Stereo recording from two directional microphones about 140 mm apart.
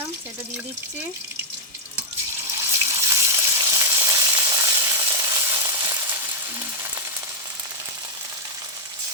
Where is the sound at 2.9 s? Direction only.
20° right (ahead or behind).